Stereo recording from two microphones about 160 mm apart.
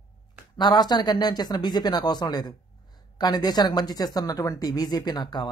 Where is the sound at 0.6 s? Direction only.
25° left (ahead or behind).